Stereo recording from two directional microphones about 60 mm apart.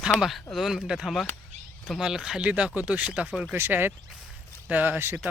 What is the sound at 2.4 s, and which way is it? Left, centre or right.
Speech, right.